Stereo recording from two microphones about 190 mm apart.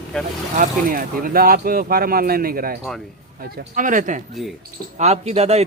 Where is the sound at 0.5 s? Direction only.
45° right (ahead or behind).